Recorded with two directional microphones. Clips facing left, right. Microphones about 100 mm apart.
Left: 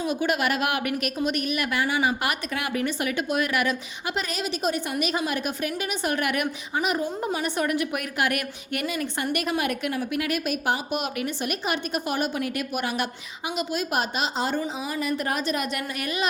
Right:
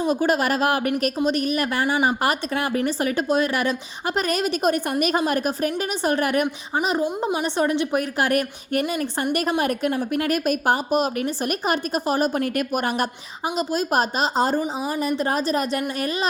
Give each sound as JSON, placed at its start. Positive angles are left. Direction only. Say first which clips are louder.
{"t": 0.1, "sound": "a woman's voice", "louder": "right 4 dB", "side_deg": -35}
{"t": 14.6, "sound": "a woman's voice", "louder": "right 4 dB", "side_deg": -25}